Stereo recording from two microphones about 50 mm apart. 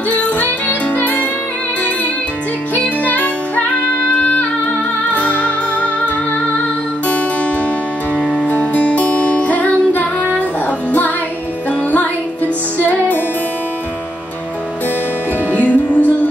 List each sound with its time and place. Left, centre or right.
0.1 s music: left
3.0 s music: left
8.5 s music: left
12.7 s music: left
15.5 s music: left